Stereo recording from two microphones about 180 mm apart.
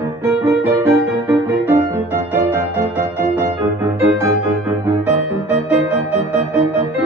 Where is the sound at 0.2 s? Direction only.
15° right (ahead or behind).